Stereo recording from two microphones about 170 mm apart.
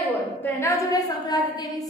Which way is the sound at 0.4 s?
15° left (ahead or behind).